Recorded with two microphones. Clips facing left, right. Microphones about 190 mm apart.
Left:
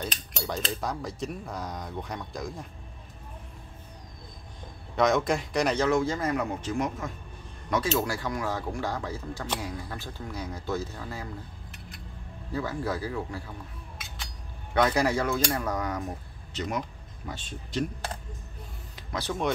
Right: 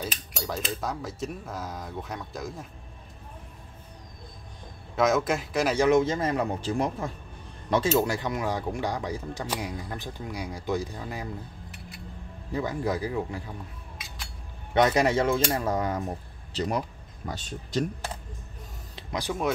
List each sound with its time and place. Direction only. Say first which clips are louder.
0.0 s cutlery: even; 5° right (ahead or behind)
4.9 s cutlery: even; centre (ahead or behind)
5.9 s speech: right 3 dB; 20° right (ahead or behind)
12.5 s speech: right 2 dB; 20° right (ahead or behind)
14.7 s speech: right 2 dB; 20° right (ahead or behind); by 17.8 s 40° right (ahead or behind)
19.1 s speech: right 1 dB; 10° right (ahead or behind)